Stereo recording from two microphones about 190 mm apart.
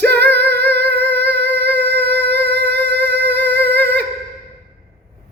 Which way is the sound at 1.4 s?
10° left (ahead or behind).